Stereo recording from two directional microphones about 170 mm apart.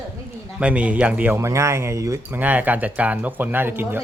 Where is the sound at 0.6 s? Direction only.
5° right (ahead or behind).